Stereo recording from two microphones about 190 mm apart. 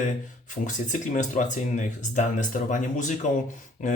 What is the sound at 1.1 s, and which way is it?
Speech, 40° left (ahead or behind).